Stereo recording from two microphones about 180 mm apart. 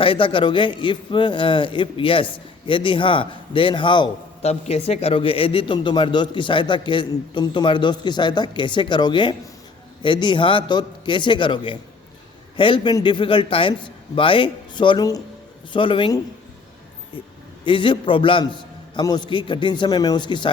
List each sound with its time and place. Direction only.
0.0 s a man's voice: 30° left (ahead or behind)
17.7 s a man's voice: 25° left (ahead or behind)